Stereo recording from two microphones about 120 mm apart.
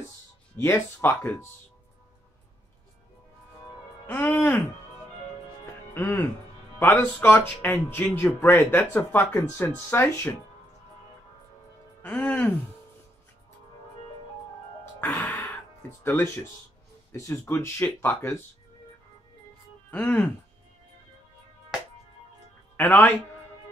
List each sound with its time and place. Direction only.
0.6 s speech: 20° left (ahead or behind)
4.0 s speech: 15° left (ahead or behind)
5.9 s speech: 15° left (ahead or behind)
12.0 s speech: 15° left (ahead or behind)
15.0 s music: 25° left (ahead or behind)
16.0 s speech: 20° left (ahead or behind)
19.9 s speech: 15° left (ahead or behind)
22.8 s speech: 15° left (ahead or behind)